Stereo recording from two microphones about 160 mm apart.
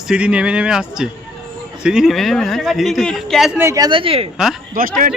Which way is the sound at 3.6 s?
20° right (ahead or behind).